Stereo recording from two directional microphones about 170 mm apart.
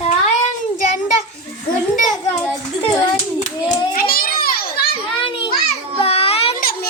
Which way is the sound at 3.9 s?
60° left (ahead or behind).